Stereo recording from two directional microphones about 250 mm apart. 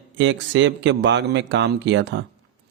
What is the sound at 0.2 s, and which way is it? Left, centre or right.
Speech, right.